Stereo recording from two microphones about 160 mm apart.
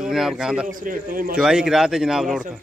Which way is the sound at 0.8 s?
60° right (ahead or behind).